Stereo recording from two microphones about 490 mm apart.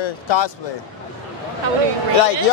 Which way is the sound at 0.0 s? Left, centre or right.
Left.